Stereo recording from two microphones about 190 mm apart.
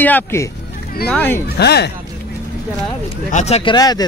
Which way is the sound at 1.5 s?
60° left (ahead or behind).